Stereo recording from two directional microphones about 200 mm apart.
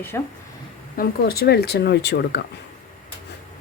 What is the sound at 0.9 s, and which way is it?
Speech, 50° left (ahead or behind).